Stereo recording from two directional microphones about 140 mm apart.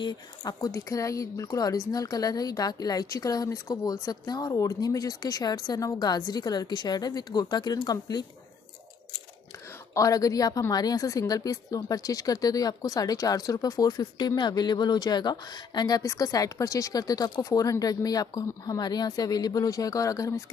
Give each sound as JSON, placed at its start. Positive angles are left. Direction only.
{"t": 0.0, "sound": "a woman's voice", "side_deg": 25}
{"t": 9.9, "sound": "a woman's voice", "side_deg": 25}